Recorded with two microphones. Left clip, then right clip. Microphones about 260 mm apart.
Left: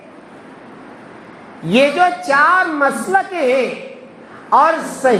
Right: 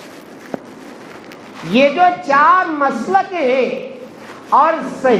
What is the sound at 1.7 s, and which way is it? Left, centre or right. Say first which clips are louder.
A woman's voice: right 1 dB; left.